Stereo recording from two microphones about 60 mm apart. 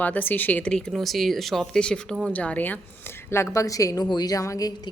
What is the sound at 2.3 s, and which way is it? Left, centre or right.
Speech, left.